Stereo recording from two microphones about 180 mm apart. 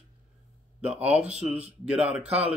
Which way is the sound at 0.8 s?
35° right (ahead or behind).